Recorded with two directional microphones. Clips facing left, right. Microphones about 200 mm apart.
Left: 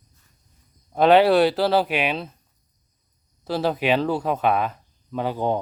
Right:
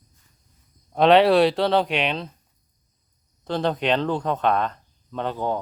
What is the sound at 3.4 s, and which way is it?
Speech, 5° left (ahead or behind).